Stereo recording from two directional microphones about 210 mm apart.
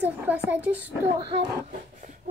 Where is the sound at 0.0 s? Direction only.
5° right (ahead or behind).